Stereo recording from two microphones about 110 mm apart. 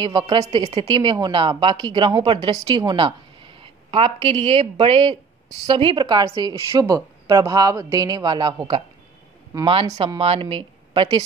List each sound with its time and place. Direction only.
0.0 s speech: 50° right (ahead or behind)
0.9 s a woman's voice: 40° right (ahead or behind)
10.0 s speech: 55° right (ahead or behind)